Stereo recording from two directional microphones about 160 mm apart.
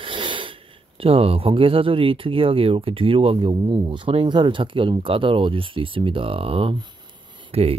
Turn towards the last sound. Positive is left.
turn(degrees=-40)  # may be behind; listen again after turning